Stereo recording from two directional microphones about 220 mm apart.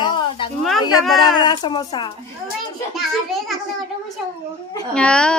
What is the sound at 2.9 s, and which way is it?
Speech, centre (ahead or behind).